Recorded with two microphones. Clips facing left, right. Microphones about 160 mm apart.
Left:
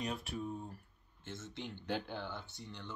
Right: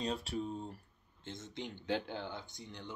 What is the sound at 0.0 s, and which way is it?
Speech, 30° right (ahead or behind).